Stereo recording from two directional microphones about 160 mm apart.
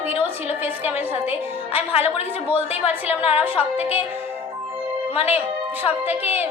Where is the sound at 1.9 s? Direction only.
40° left (ahead or behind).